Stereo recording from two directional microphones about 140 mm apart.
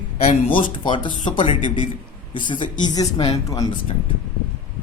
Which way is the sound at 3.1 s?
45° left (ahead or behind).